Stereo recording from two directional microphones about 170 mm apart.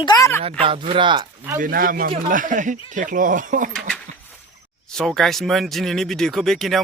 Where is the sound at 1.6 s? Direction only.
55° right (ahead or behind).